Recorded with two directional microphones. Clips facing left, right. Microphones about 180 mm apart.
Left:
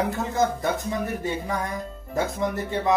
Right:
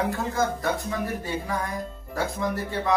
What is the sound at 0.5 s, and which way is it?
Speech, 20° left (ahead or behind).